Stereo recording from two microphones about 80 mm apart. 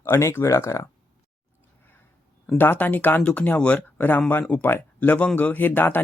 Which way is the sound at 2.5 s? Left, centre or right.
Left.